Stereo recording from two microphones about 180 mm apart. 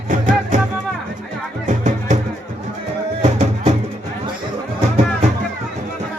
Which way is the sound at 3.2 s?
40° right (ahead or behind).